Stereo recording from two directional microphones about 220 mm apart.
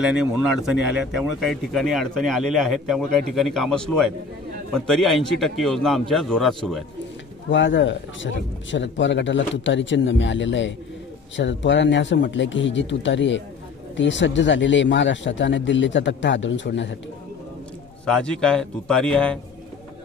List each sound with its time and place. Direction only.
0.0 s speech: 5° right (ahead or behind)
7.4 s speech: 55° left (ahead or behind)
18.0 s speech: 5° left (ahead or behind)